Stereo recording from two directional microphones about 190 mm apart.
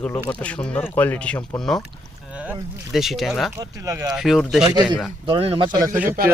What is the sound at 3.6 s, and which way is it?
Speech, 15° right (ahead or behind).